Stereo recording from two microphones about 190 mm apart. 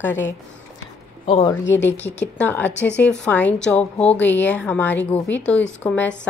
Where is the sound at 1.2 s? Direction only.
25° left (ahead or behind).